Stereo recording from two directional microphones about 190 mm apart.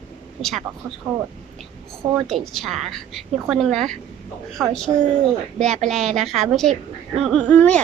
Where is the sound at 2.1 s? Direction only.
Centre (ahead or behind).